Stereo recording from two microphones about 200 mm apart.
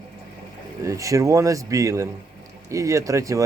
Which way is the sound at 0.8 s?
15° right (ahead or behind).